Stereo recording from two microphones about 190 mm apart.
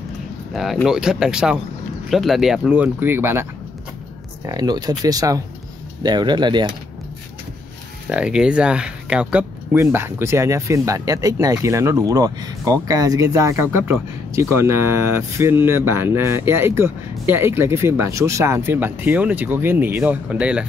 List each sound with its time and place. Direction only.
0.5 s speech: centre (ahead or behind)
4.5 s speech: 20° right (ahead or behind)
8.1 s speech: 5° right (ahead or behind)